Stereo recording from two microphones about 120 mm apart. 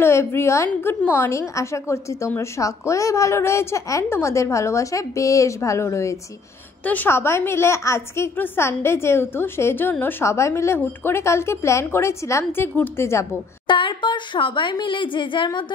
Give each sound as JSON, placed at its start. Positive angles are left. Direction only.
{"t": 0.0, "sound": "a woman's voice", "side_deg": 20}
{"t": 6.8, "sound": "a woman's voice", "side_deg": 15}
{"t": 13.7, "sound": "speech", "side_deg": 45}